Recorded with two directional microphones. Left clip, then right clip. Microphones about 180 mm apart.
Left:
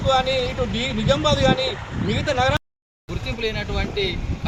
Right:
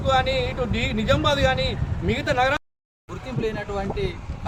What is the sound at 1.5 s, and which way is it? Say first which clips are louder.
Speech: left 3 dB; 35° right (ahead or behind).